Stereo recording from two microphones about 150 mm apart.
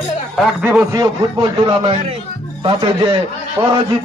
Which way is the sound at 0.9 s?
25° right (ahead or behind).